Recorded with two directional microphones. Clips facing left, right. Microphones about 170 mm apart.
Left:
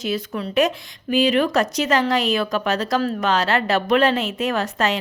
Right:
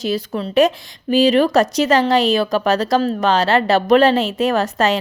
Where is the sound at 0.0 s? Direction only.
35° right (ahead or behind).